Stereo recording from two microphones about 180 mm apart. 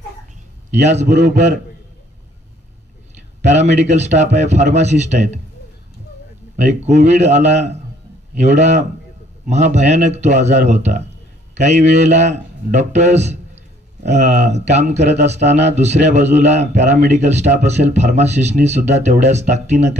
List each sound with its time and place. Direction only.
0.7 s a man's voice: 40° right (ahead or behind)
3.4 s speech: 40° right (ahead or behind)
6.5 s speech: 40° right (ahead or behind)